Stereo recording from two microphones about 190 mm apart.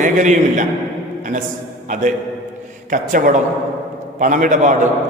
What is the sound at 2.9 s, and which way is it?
A man's voice, 45° right (ahead or behind).